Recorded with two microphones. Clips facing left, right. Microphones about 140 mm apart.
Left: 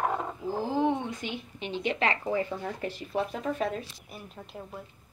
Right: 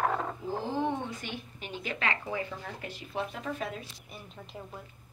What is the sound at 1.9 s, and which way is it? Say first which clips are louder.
Speech: left 5 dB; 30° left (ahead or behind).